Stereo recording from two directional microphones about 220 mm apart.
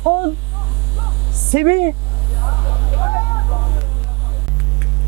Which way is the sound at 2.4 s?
20° right (ahead or behind).